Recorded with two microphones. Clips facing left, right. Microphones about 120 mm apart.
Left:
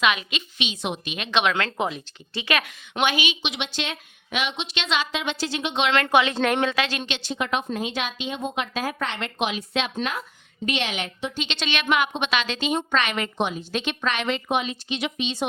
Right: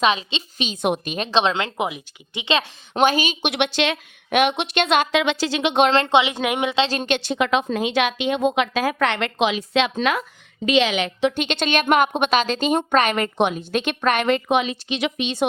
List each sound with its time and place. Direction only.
0.0 s a woman's voice: 30° right (ahead or behind)
0.7 s a woman's voice: 55° right (ahead or behind)
1.1 s a woman's voice: 35° right (ahead or behind)
1.5 s a woman's voice: 15° right (ahead or behind); by 3.3 s 40° right (ahead or behind)
3.4 s a woman's voice: 65° right (ahead or behind)
5.2 s a woman's voice: 90° right
5.9 s a woman's voice: 25° right (ahead or behind)
7.0 s a woman's voice: 60° right (ahead or behind); by 11.3 s 90° right
11.3 s a woman's voice: 50° right (ahead or behind)
13.3 s a woman's voice: 60° right (ahead or behind)
14.4 s a woman's voice: 85° right; by 15.4 s 65° right (ahead or behind)